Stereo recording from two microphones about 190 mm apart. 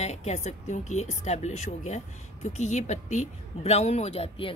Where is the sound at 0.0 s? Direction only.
35° left (ahead or behind).